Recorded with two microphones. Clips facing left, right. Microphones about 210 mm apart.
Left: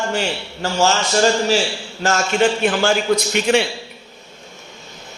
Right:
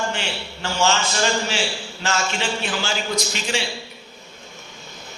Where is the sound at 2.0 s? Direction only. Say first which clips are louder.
Left 8 dB; 50° left (ahead or behind).